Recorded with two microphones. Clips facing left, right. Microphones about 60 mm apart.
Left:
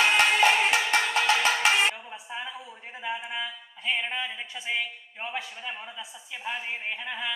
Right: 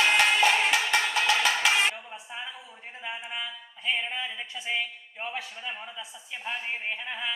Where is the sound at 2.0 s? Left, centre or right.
Centre.